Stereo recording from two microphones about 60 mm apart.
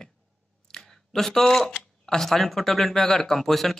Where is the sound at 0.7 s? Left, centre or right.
Centre.